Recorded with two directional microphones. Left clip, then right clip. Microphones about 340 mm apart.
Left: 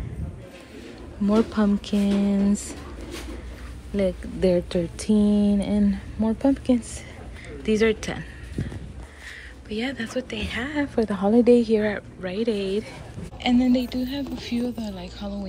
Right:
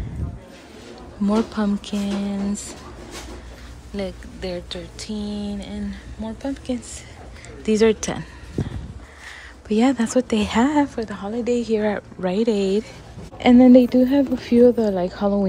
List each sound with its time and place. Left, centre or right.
1.2 s speech: centre
3.9 s speech: centre
7.6 s speech: centre
9.7 s speech: centre
13.4 s speech: centre